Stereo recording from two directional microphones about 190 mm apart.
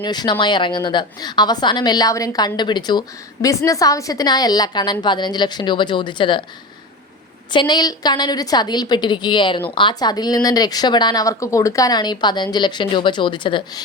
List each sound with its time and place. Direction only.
0.0 s speech: 20° left (ahead or behind)
7.5 s speech: 25° left (ahead or behind)